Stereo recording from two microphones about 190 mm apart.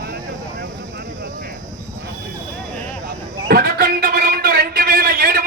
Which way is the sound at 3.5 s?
50° right (ahead or behind).